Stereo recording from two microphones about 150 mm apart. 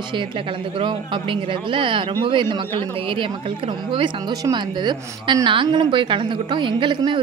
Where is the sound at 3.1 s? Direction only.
35° right (ahead or behind).